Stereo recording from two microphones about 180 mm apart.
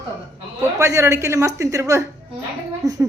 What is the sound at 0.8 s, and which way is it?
Speech, 15° right (ahead or behind).